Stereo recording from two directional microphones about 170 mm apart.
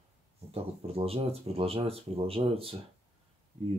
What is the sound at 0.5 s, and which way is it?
Speech, 35° right (ahead or behind).